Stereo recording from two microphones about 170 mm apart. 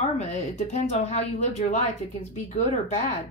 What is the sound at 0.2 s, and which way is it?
A woman's voice, 40° left (ahead or behind).